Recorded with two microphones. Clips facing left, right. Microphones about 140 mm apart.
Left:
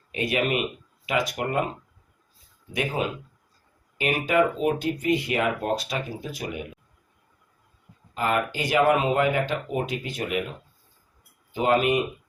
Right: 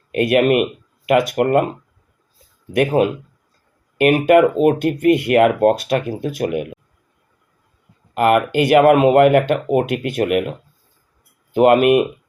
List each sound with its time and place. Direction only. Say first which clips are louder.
0.1 s speech: right 11 dB; 60° right (ahead or behind)
2.7 s speech: right 12 dB; 60° right (ahead or behind)
8.1 s speech: right 11 dB; 65° right (ahead or behind)
11.5 s speech: right 10 dB; 65° right (ahead or behind)